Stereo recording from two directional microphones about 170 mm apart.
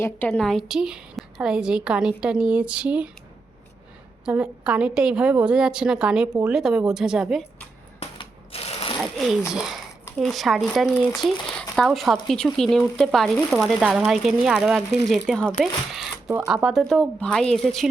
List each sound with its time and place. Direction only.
0.0 s a woman's voice: 10° left (ahead or behind); by 3.1 s 5° right (ahead or behind)
4.3 s a woman's voice: 5° right (ahead or behind)
7.9 s shuffling cards: 35° left (ahead or behind)
9.0 s sewing machine: centre (ahead or behind)
9.5 s a woman's voice: 5° right (ahead or behind)